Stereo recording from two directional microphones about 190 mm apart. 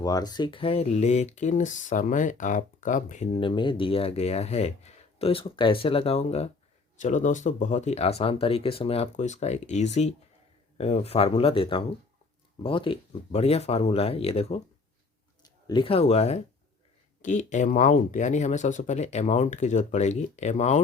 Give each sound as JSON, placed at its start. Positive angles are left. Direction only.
{"t": 0.0, "sound": "speech", "side_deg": 20}